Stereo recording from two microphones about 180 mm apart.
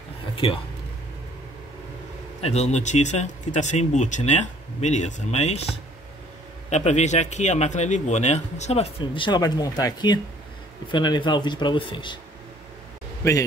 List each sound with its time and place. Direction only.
0.4 s a man's voice: 30° left (ahead or behind)
2.4 s a man's voice: 35° left (ahead or behind)
6.7 s a man's voice: 40° left (ahead or behind)